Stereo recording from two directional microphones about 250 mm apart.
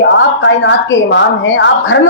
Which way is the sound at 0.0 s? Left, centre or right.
Left.